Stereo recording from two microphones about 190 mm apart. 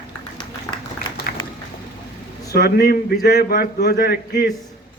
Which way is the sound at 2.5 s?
55° left (ahead or behind).